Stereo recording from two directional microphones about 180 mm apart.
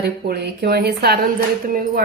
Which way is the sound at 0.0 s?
65° right (ahead or behind).